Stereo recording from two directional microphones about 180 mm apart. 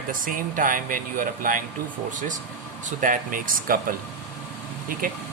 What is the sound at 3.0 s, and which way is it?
Speech, 50° right (ahead or behind).